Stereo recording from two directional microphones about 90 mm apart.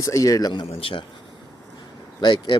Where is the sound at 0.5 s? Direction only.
90° left.